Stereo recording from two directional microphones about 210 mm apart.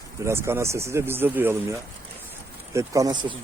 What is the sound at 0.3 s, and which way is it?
Speech, 10° right (ahead or behind).